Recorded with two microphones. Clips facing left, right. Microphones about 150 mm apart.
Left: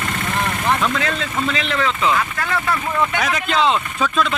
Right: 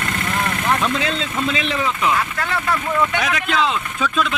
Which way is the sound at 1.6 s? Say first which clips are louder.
Left 1 dB; 65° left (ahead or behind).